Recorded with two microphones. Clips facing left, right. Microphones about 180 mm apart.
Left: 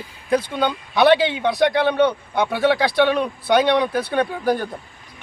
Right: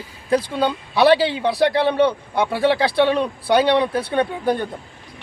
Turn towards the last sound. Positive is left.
turn(degrees=-25)  # may be behind; listen again after turning